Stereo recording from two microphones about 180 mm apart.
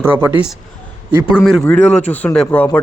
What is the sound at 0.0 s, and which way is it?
A man's voice, 10° right (ahead or behind).